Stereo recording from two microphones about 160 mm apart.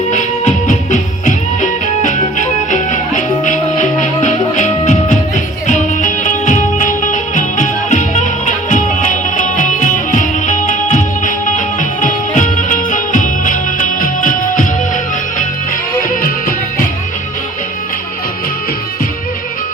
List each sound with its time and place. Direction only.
0.1 s music: 50° left (ahead or behind)
16.2 s music: 60° left (ahead or behind)